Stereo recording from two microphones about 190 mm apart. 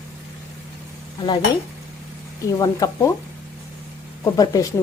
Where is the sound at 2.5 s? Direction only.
20° left (ahead or behind).